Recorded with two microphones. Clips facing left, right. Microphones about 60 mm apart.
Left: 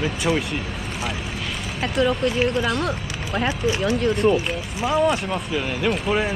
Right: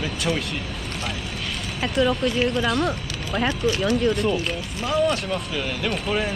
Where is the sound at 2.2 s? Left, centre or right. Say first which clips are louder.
Left 1 dB; centre.